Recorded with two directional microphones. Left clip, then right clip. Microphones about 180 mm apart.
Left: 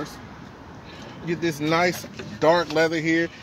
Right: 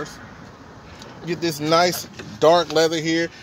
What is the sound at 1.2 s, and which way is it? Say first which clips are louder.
Speech: right 1 dB; 55° right (ahead or behind).